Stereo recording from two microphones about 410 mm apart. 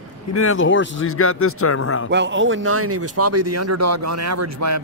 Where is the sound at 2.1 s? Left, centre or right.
Right.